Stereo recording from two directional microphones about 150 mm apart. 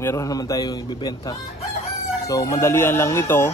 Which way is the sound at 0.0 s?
20° left (ahead or behind).